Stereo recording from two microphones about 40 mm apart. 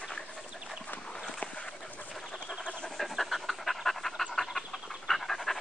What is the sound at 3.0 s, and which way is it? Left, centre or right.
Pant, centre.